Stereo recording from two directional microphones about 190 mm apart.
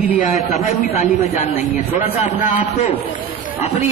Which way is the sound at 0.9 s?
35° left (ahead or behind).